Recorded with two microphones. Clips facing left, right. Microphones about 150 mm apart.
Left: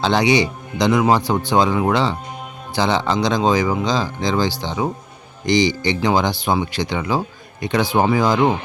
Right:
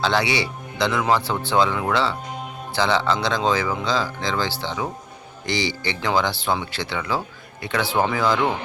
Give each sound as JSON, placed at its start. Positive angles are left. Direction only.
{"t": 0.0, "sound": "a man's voice", "side_deg": 20}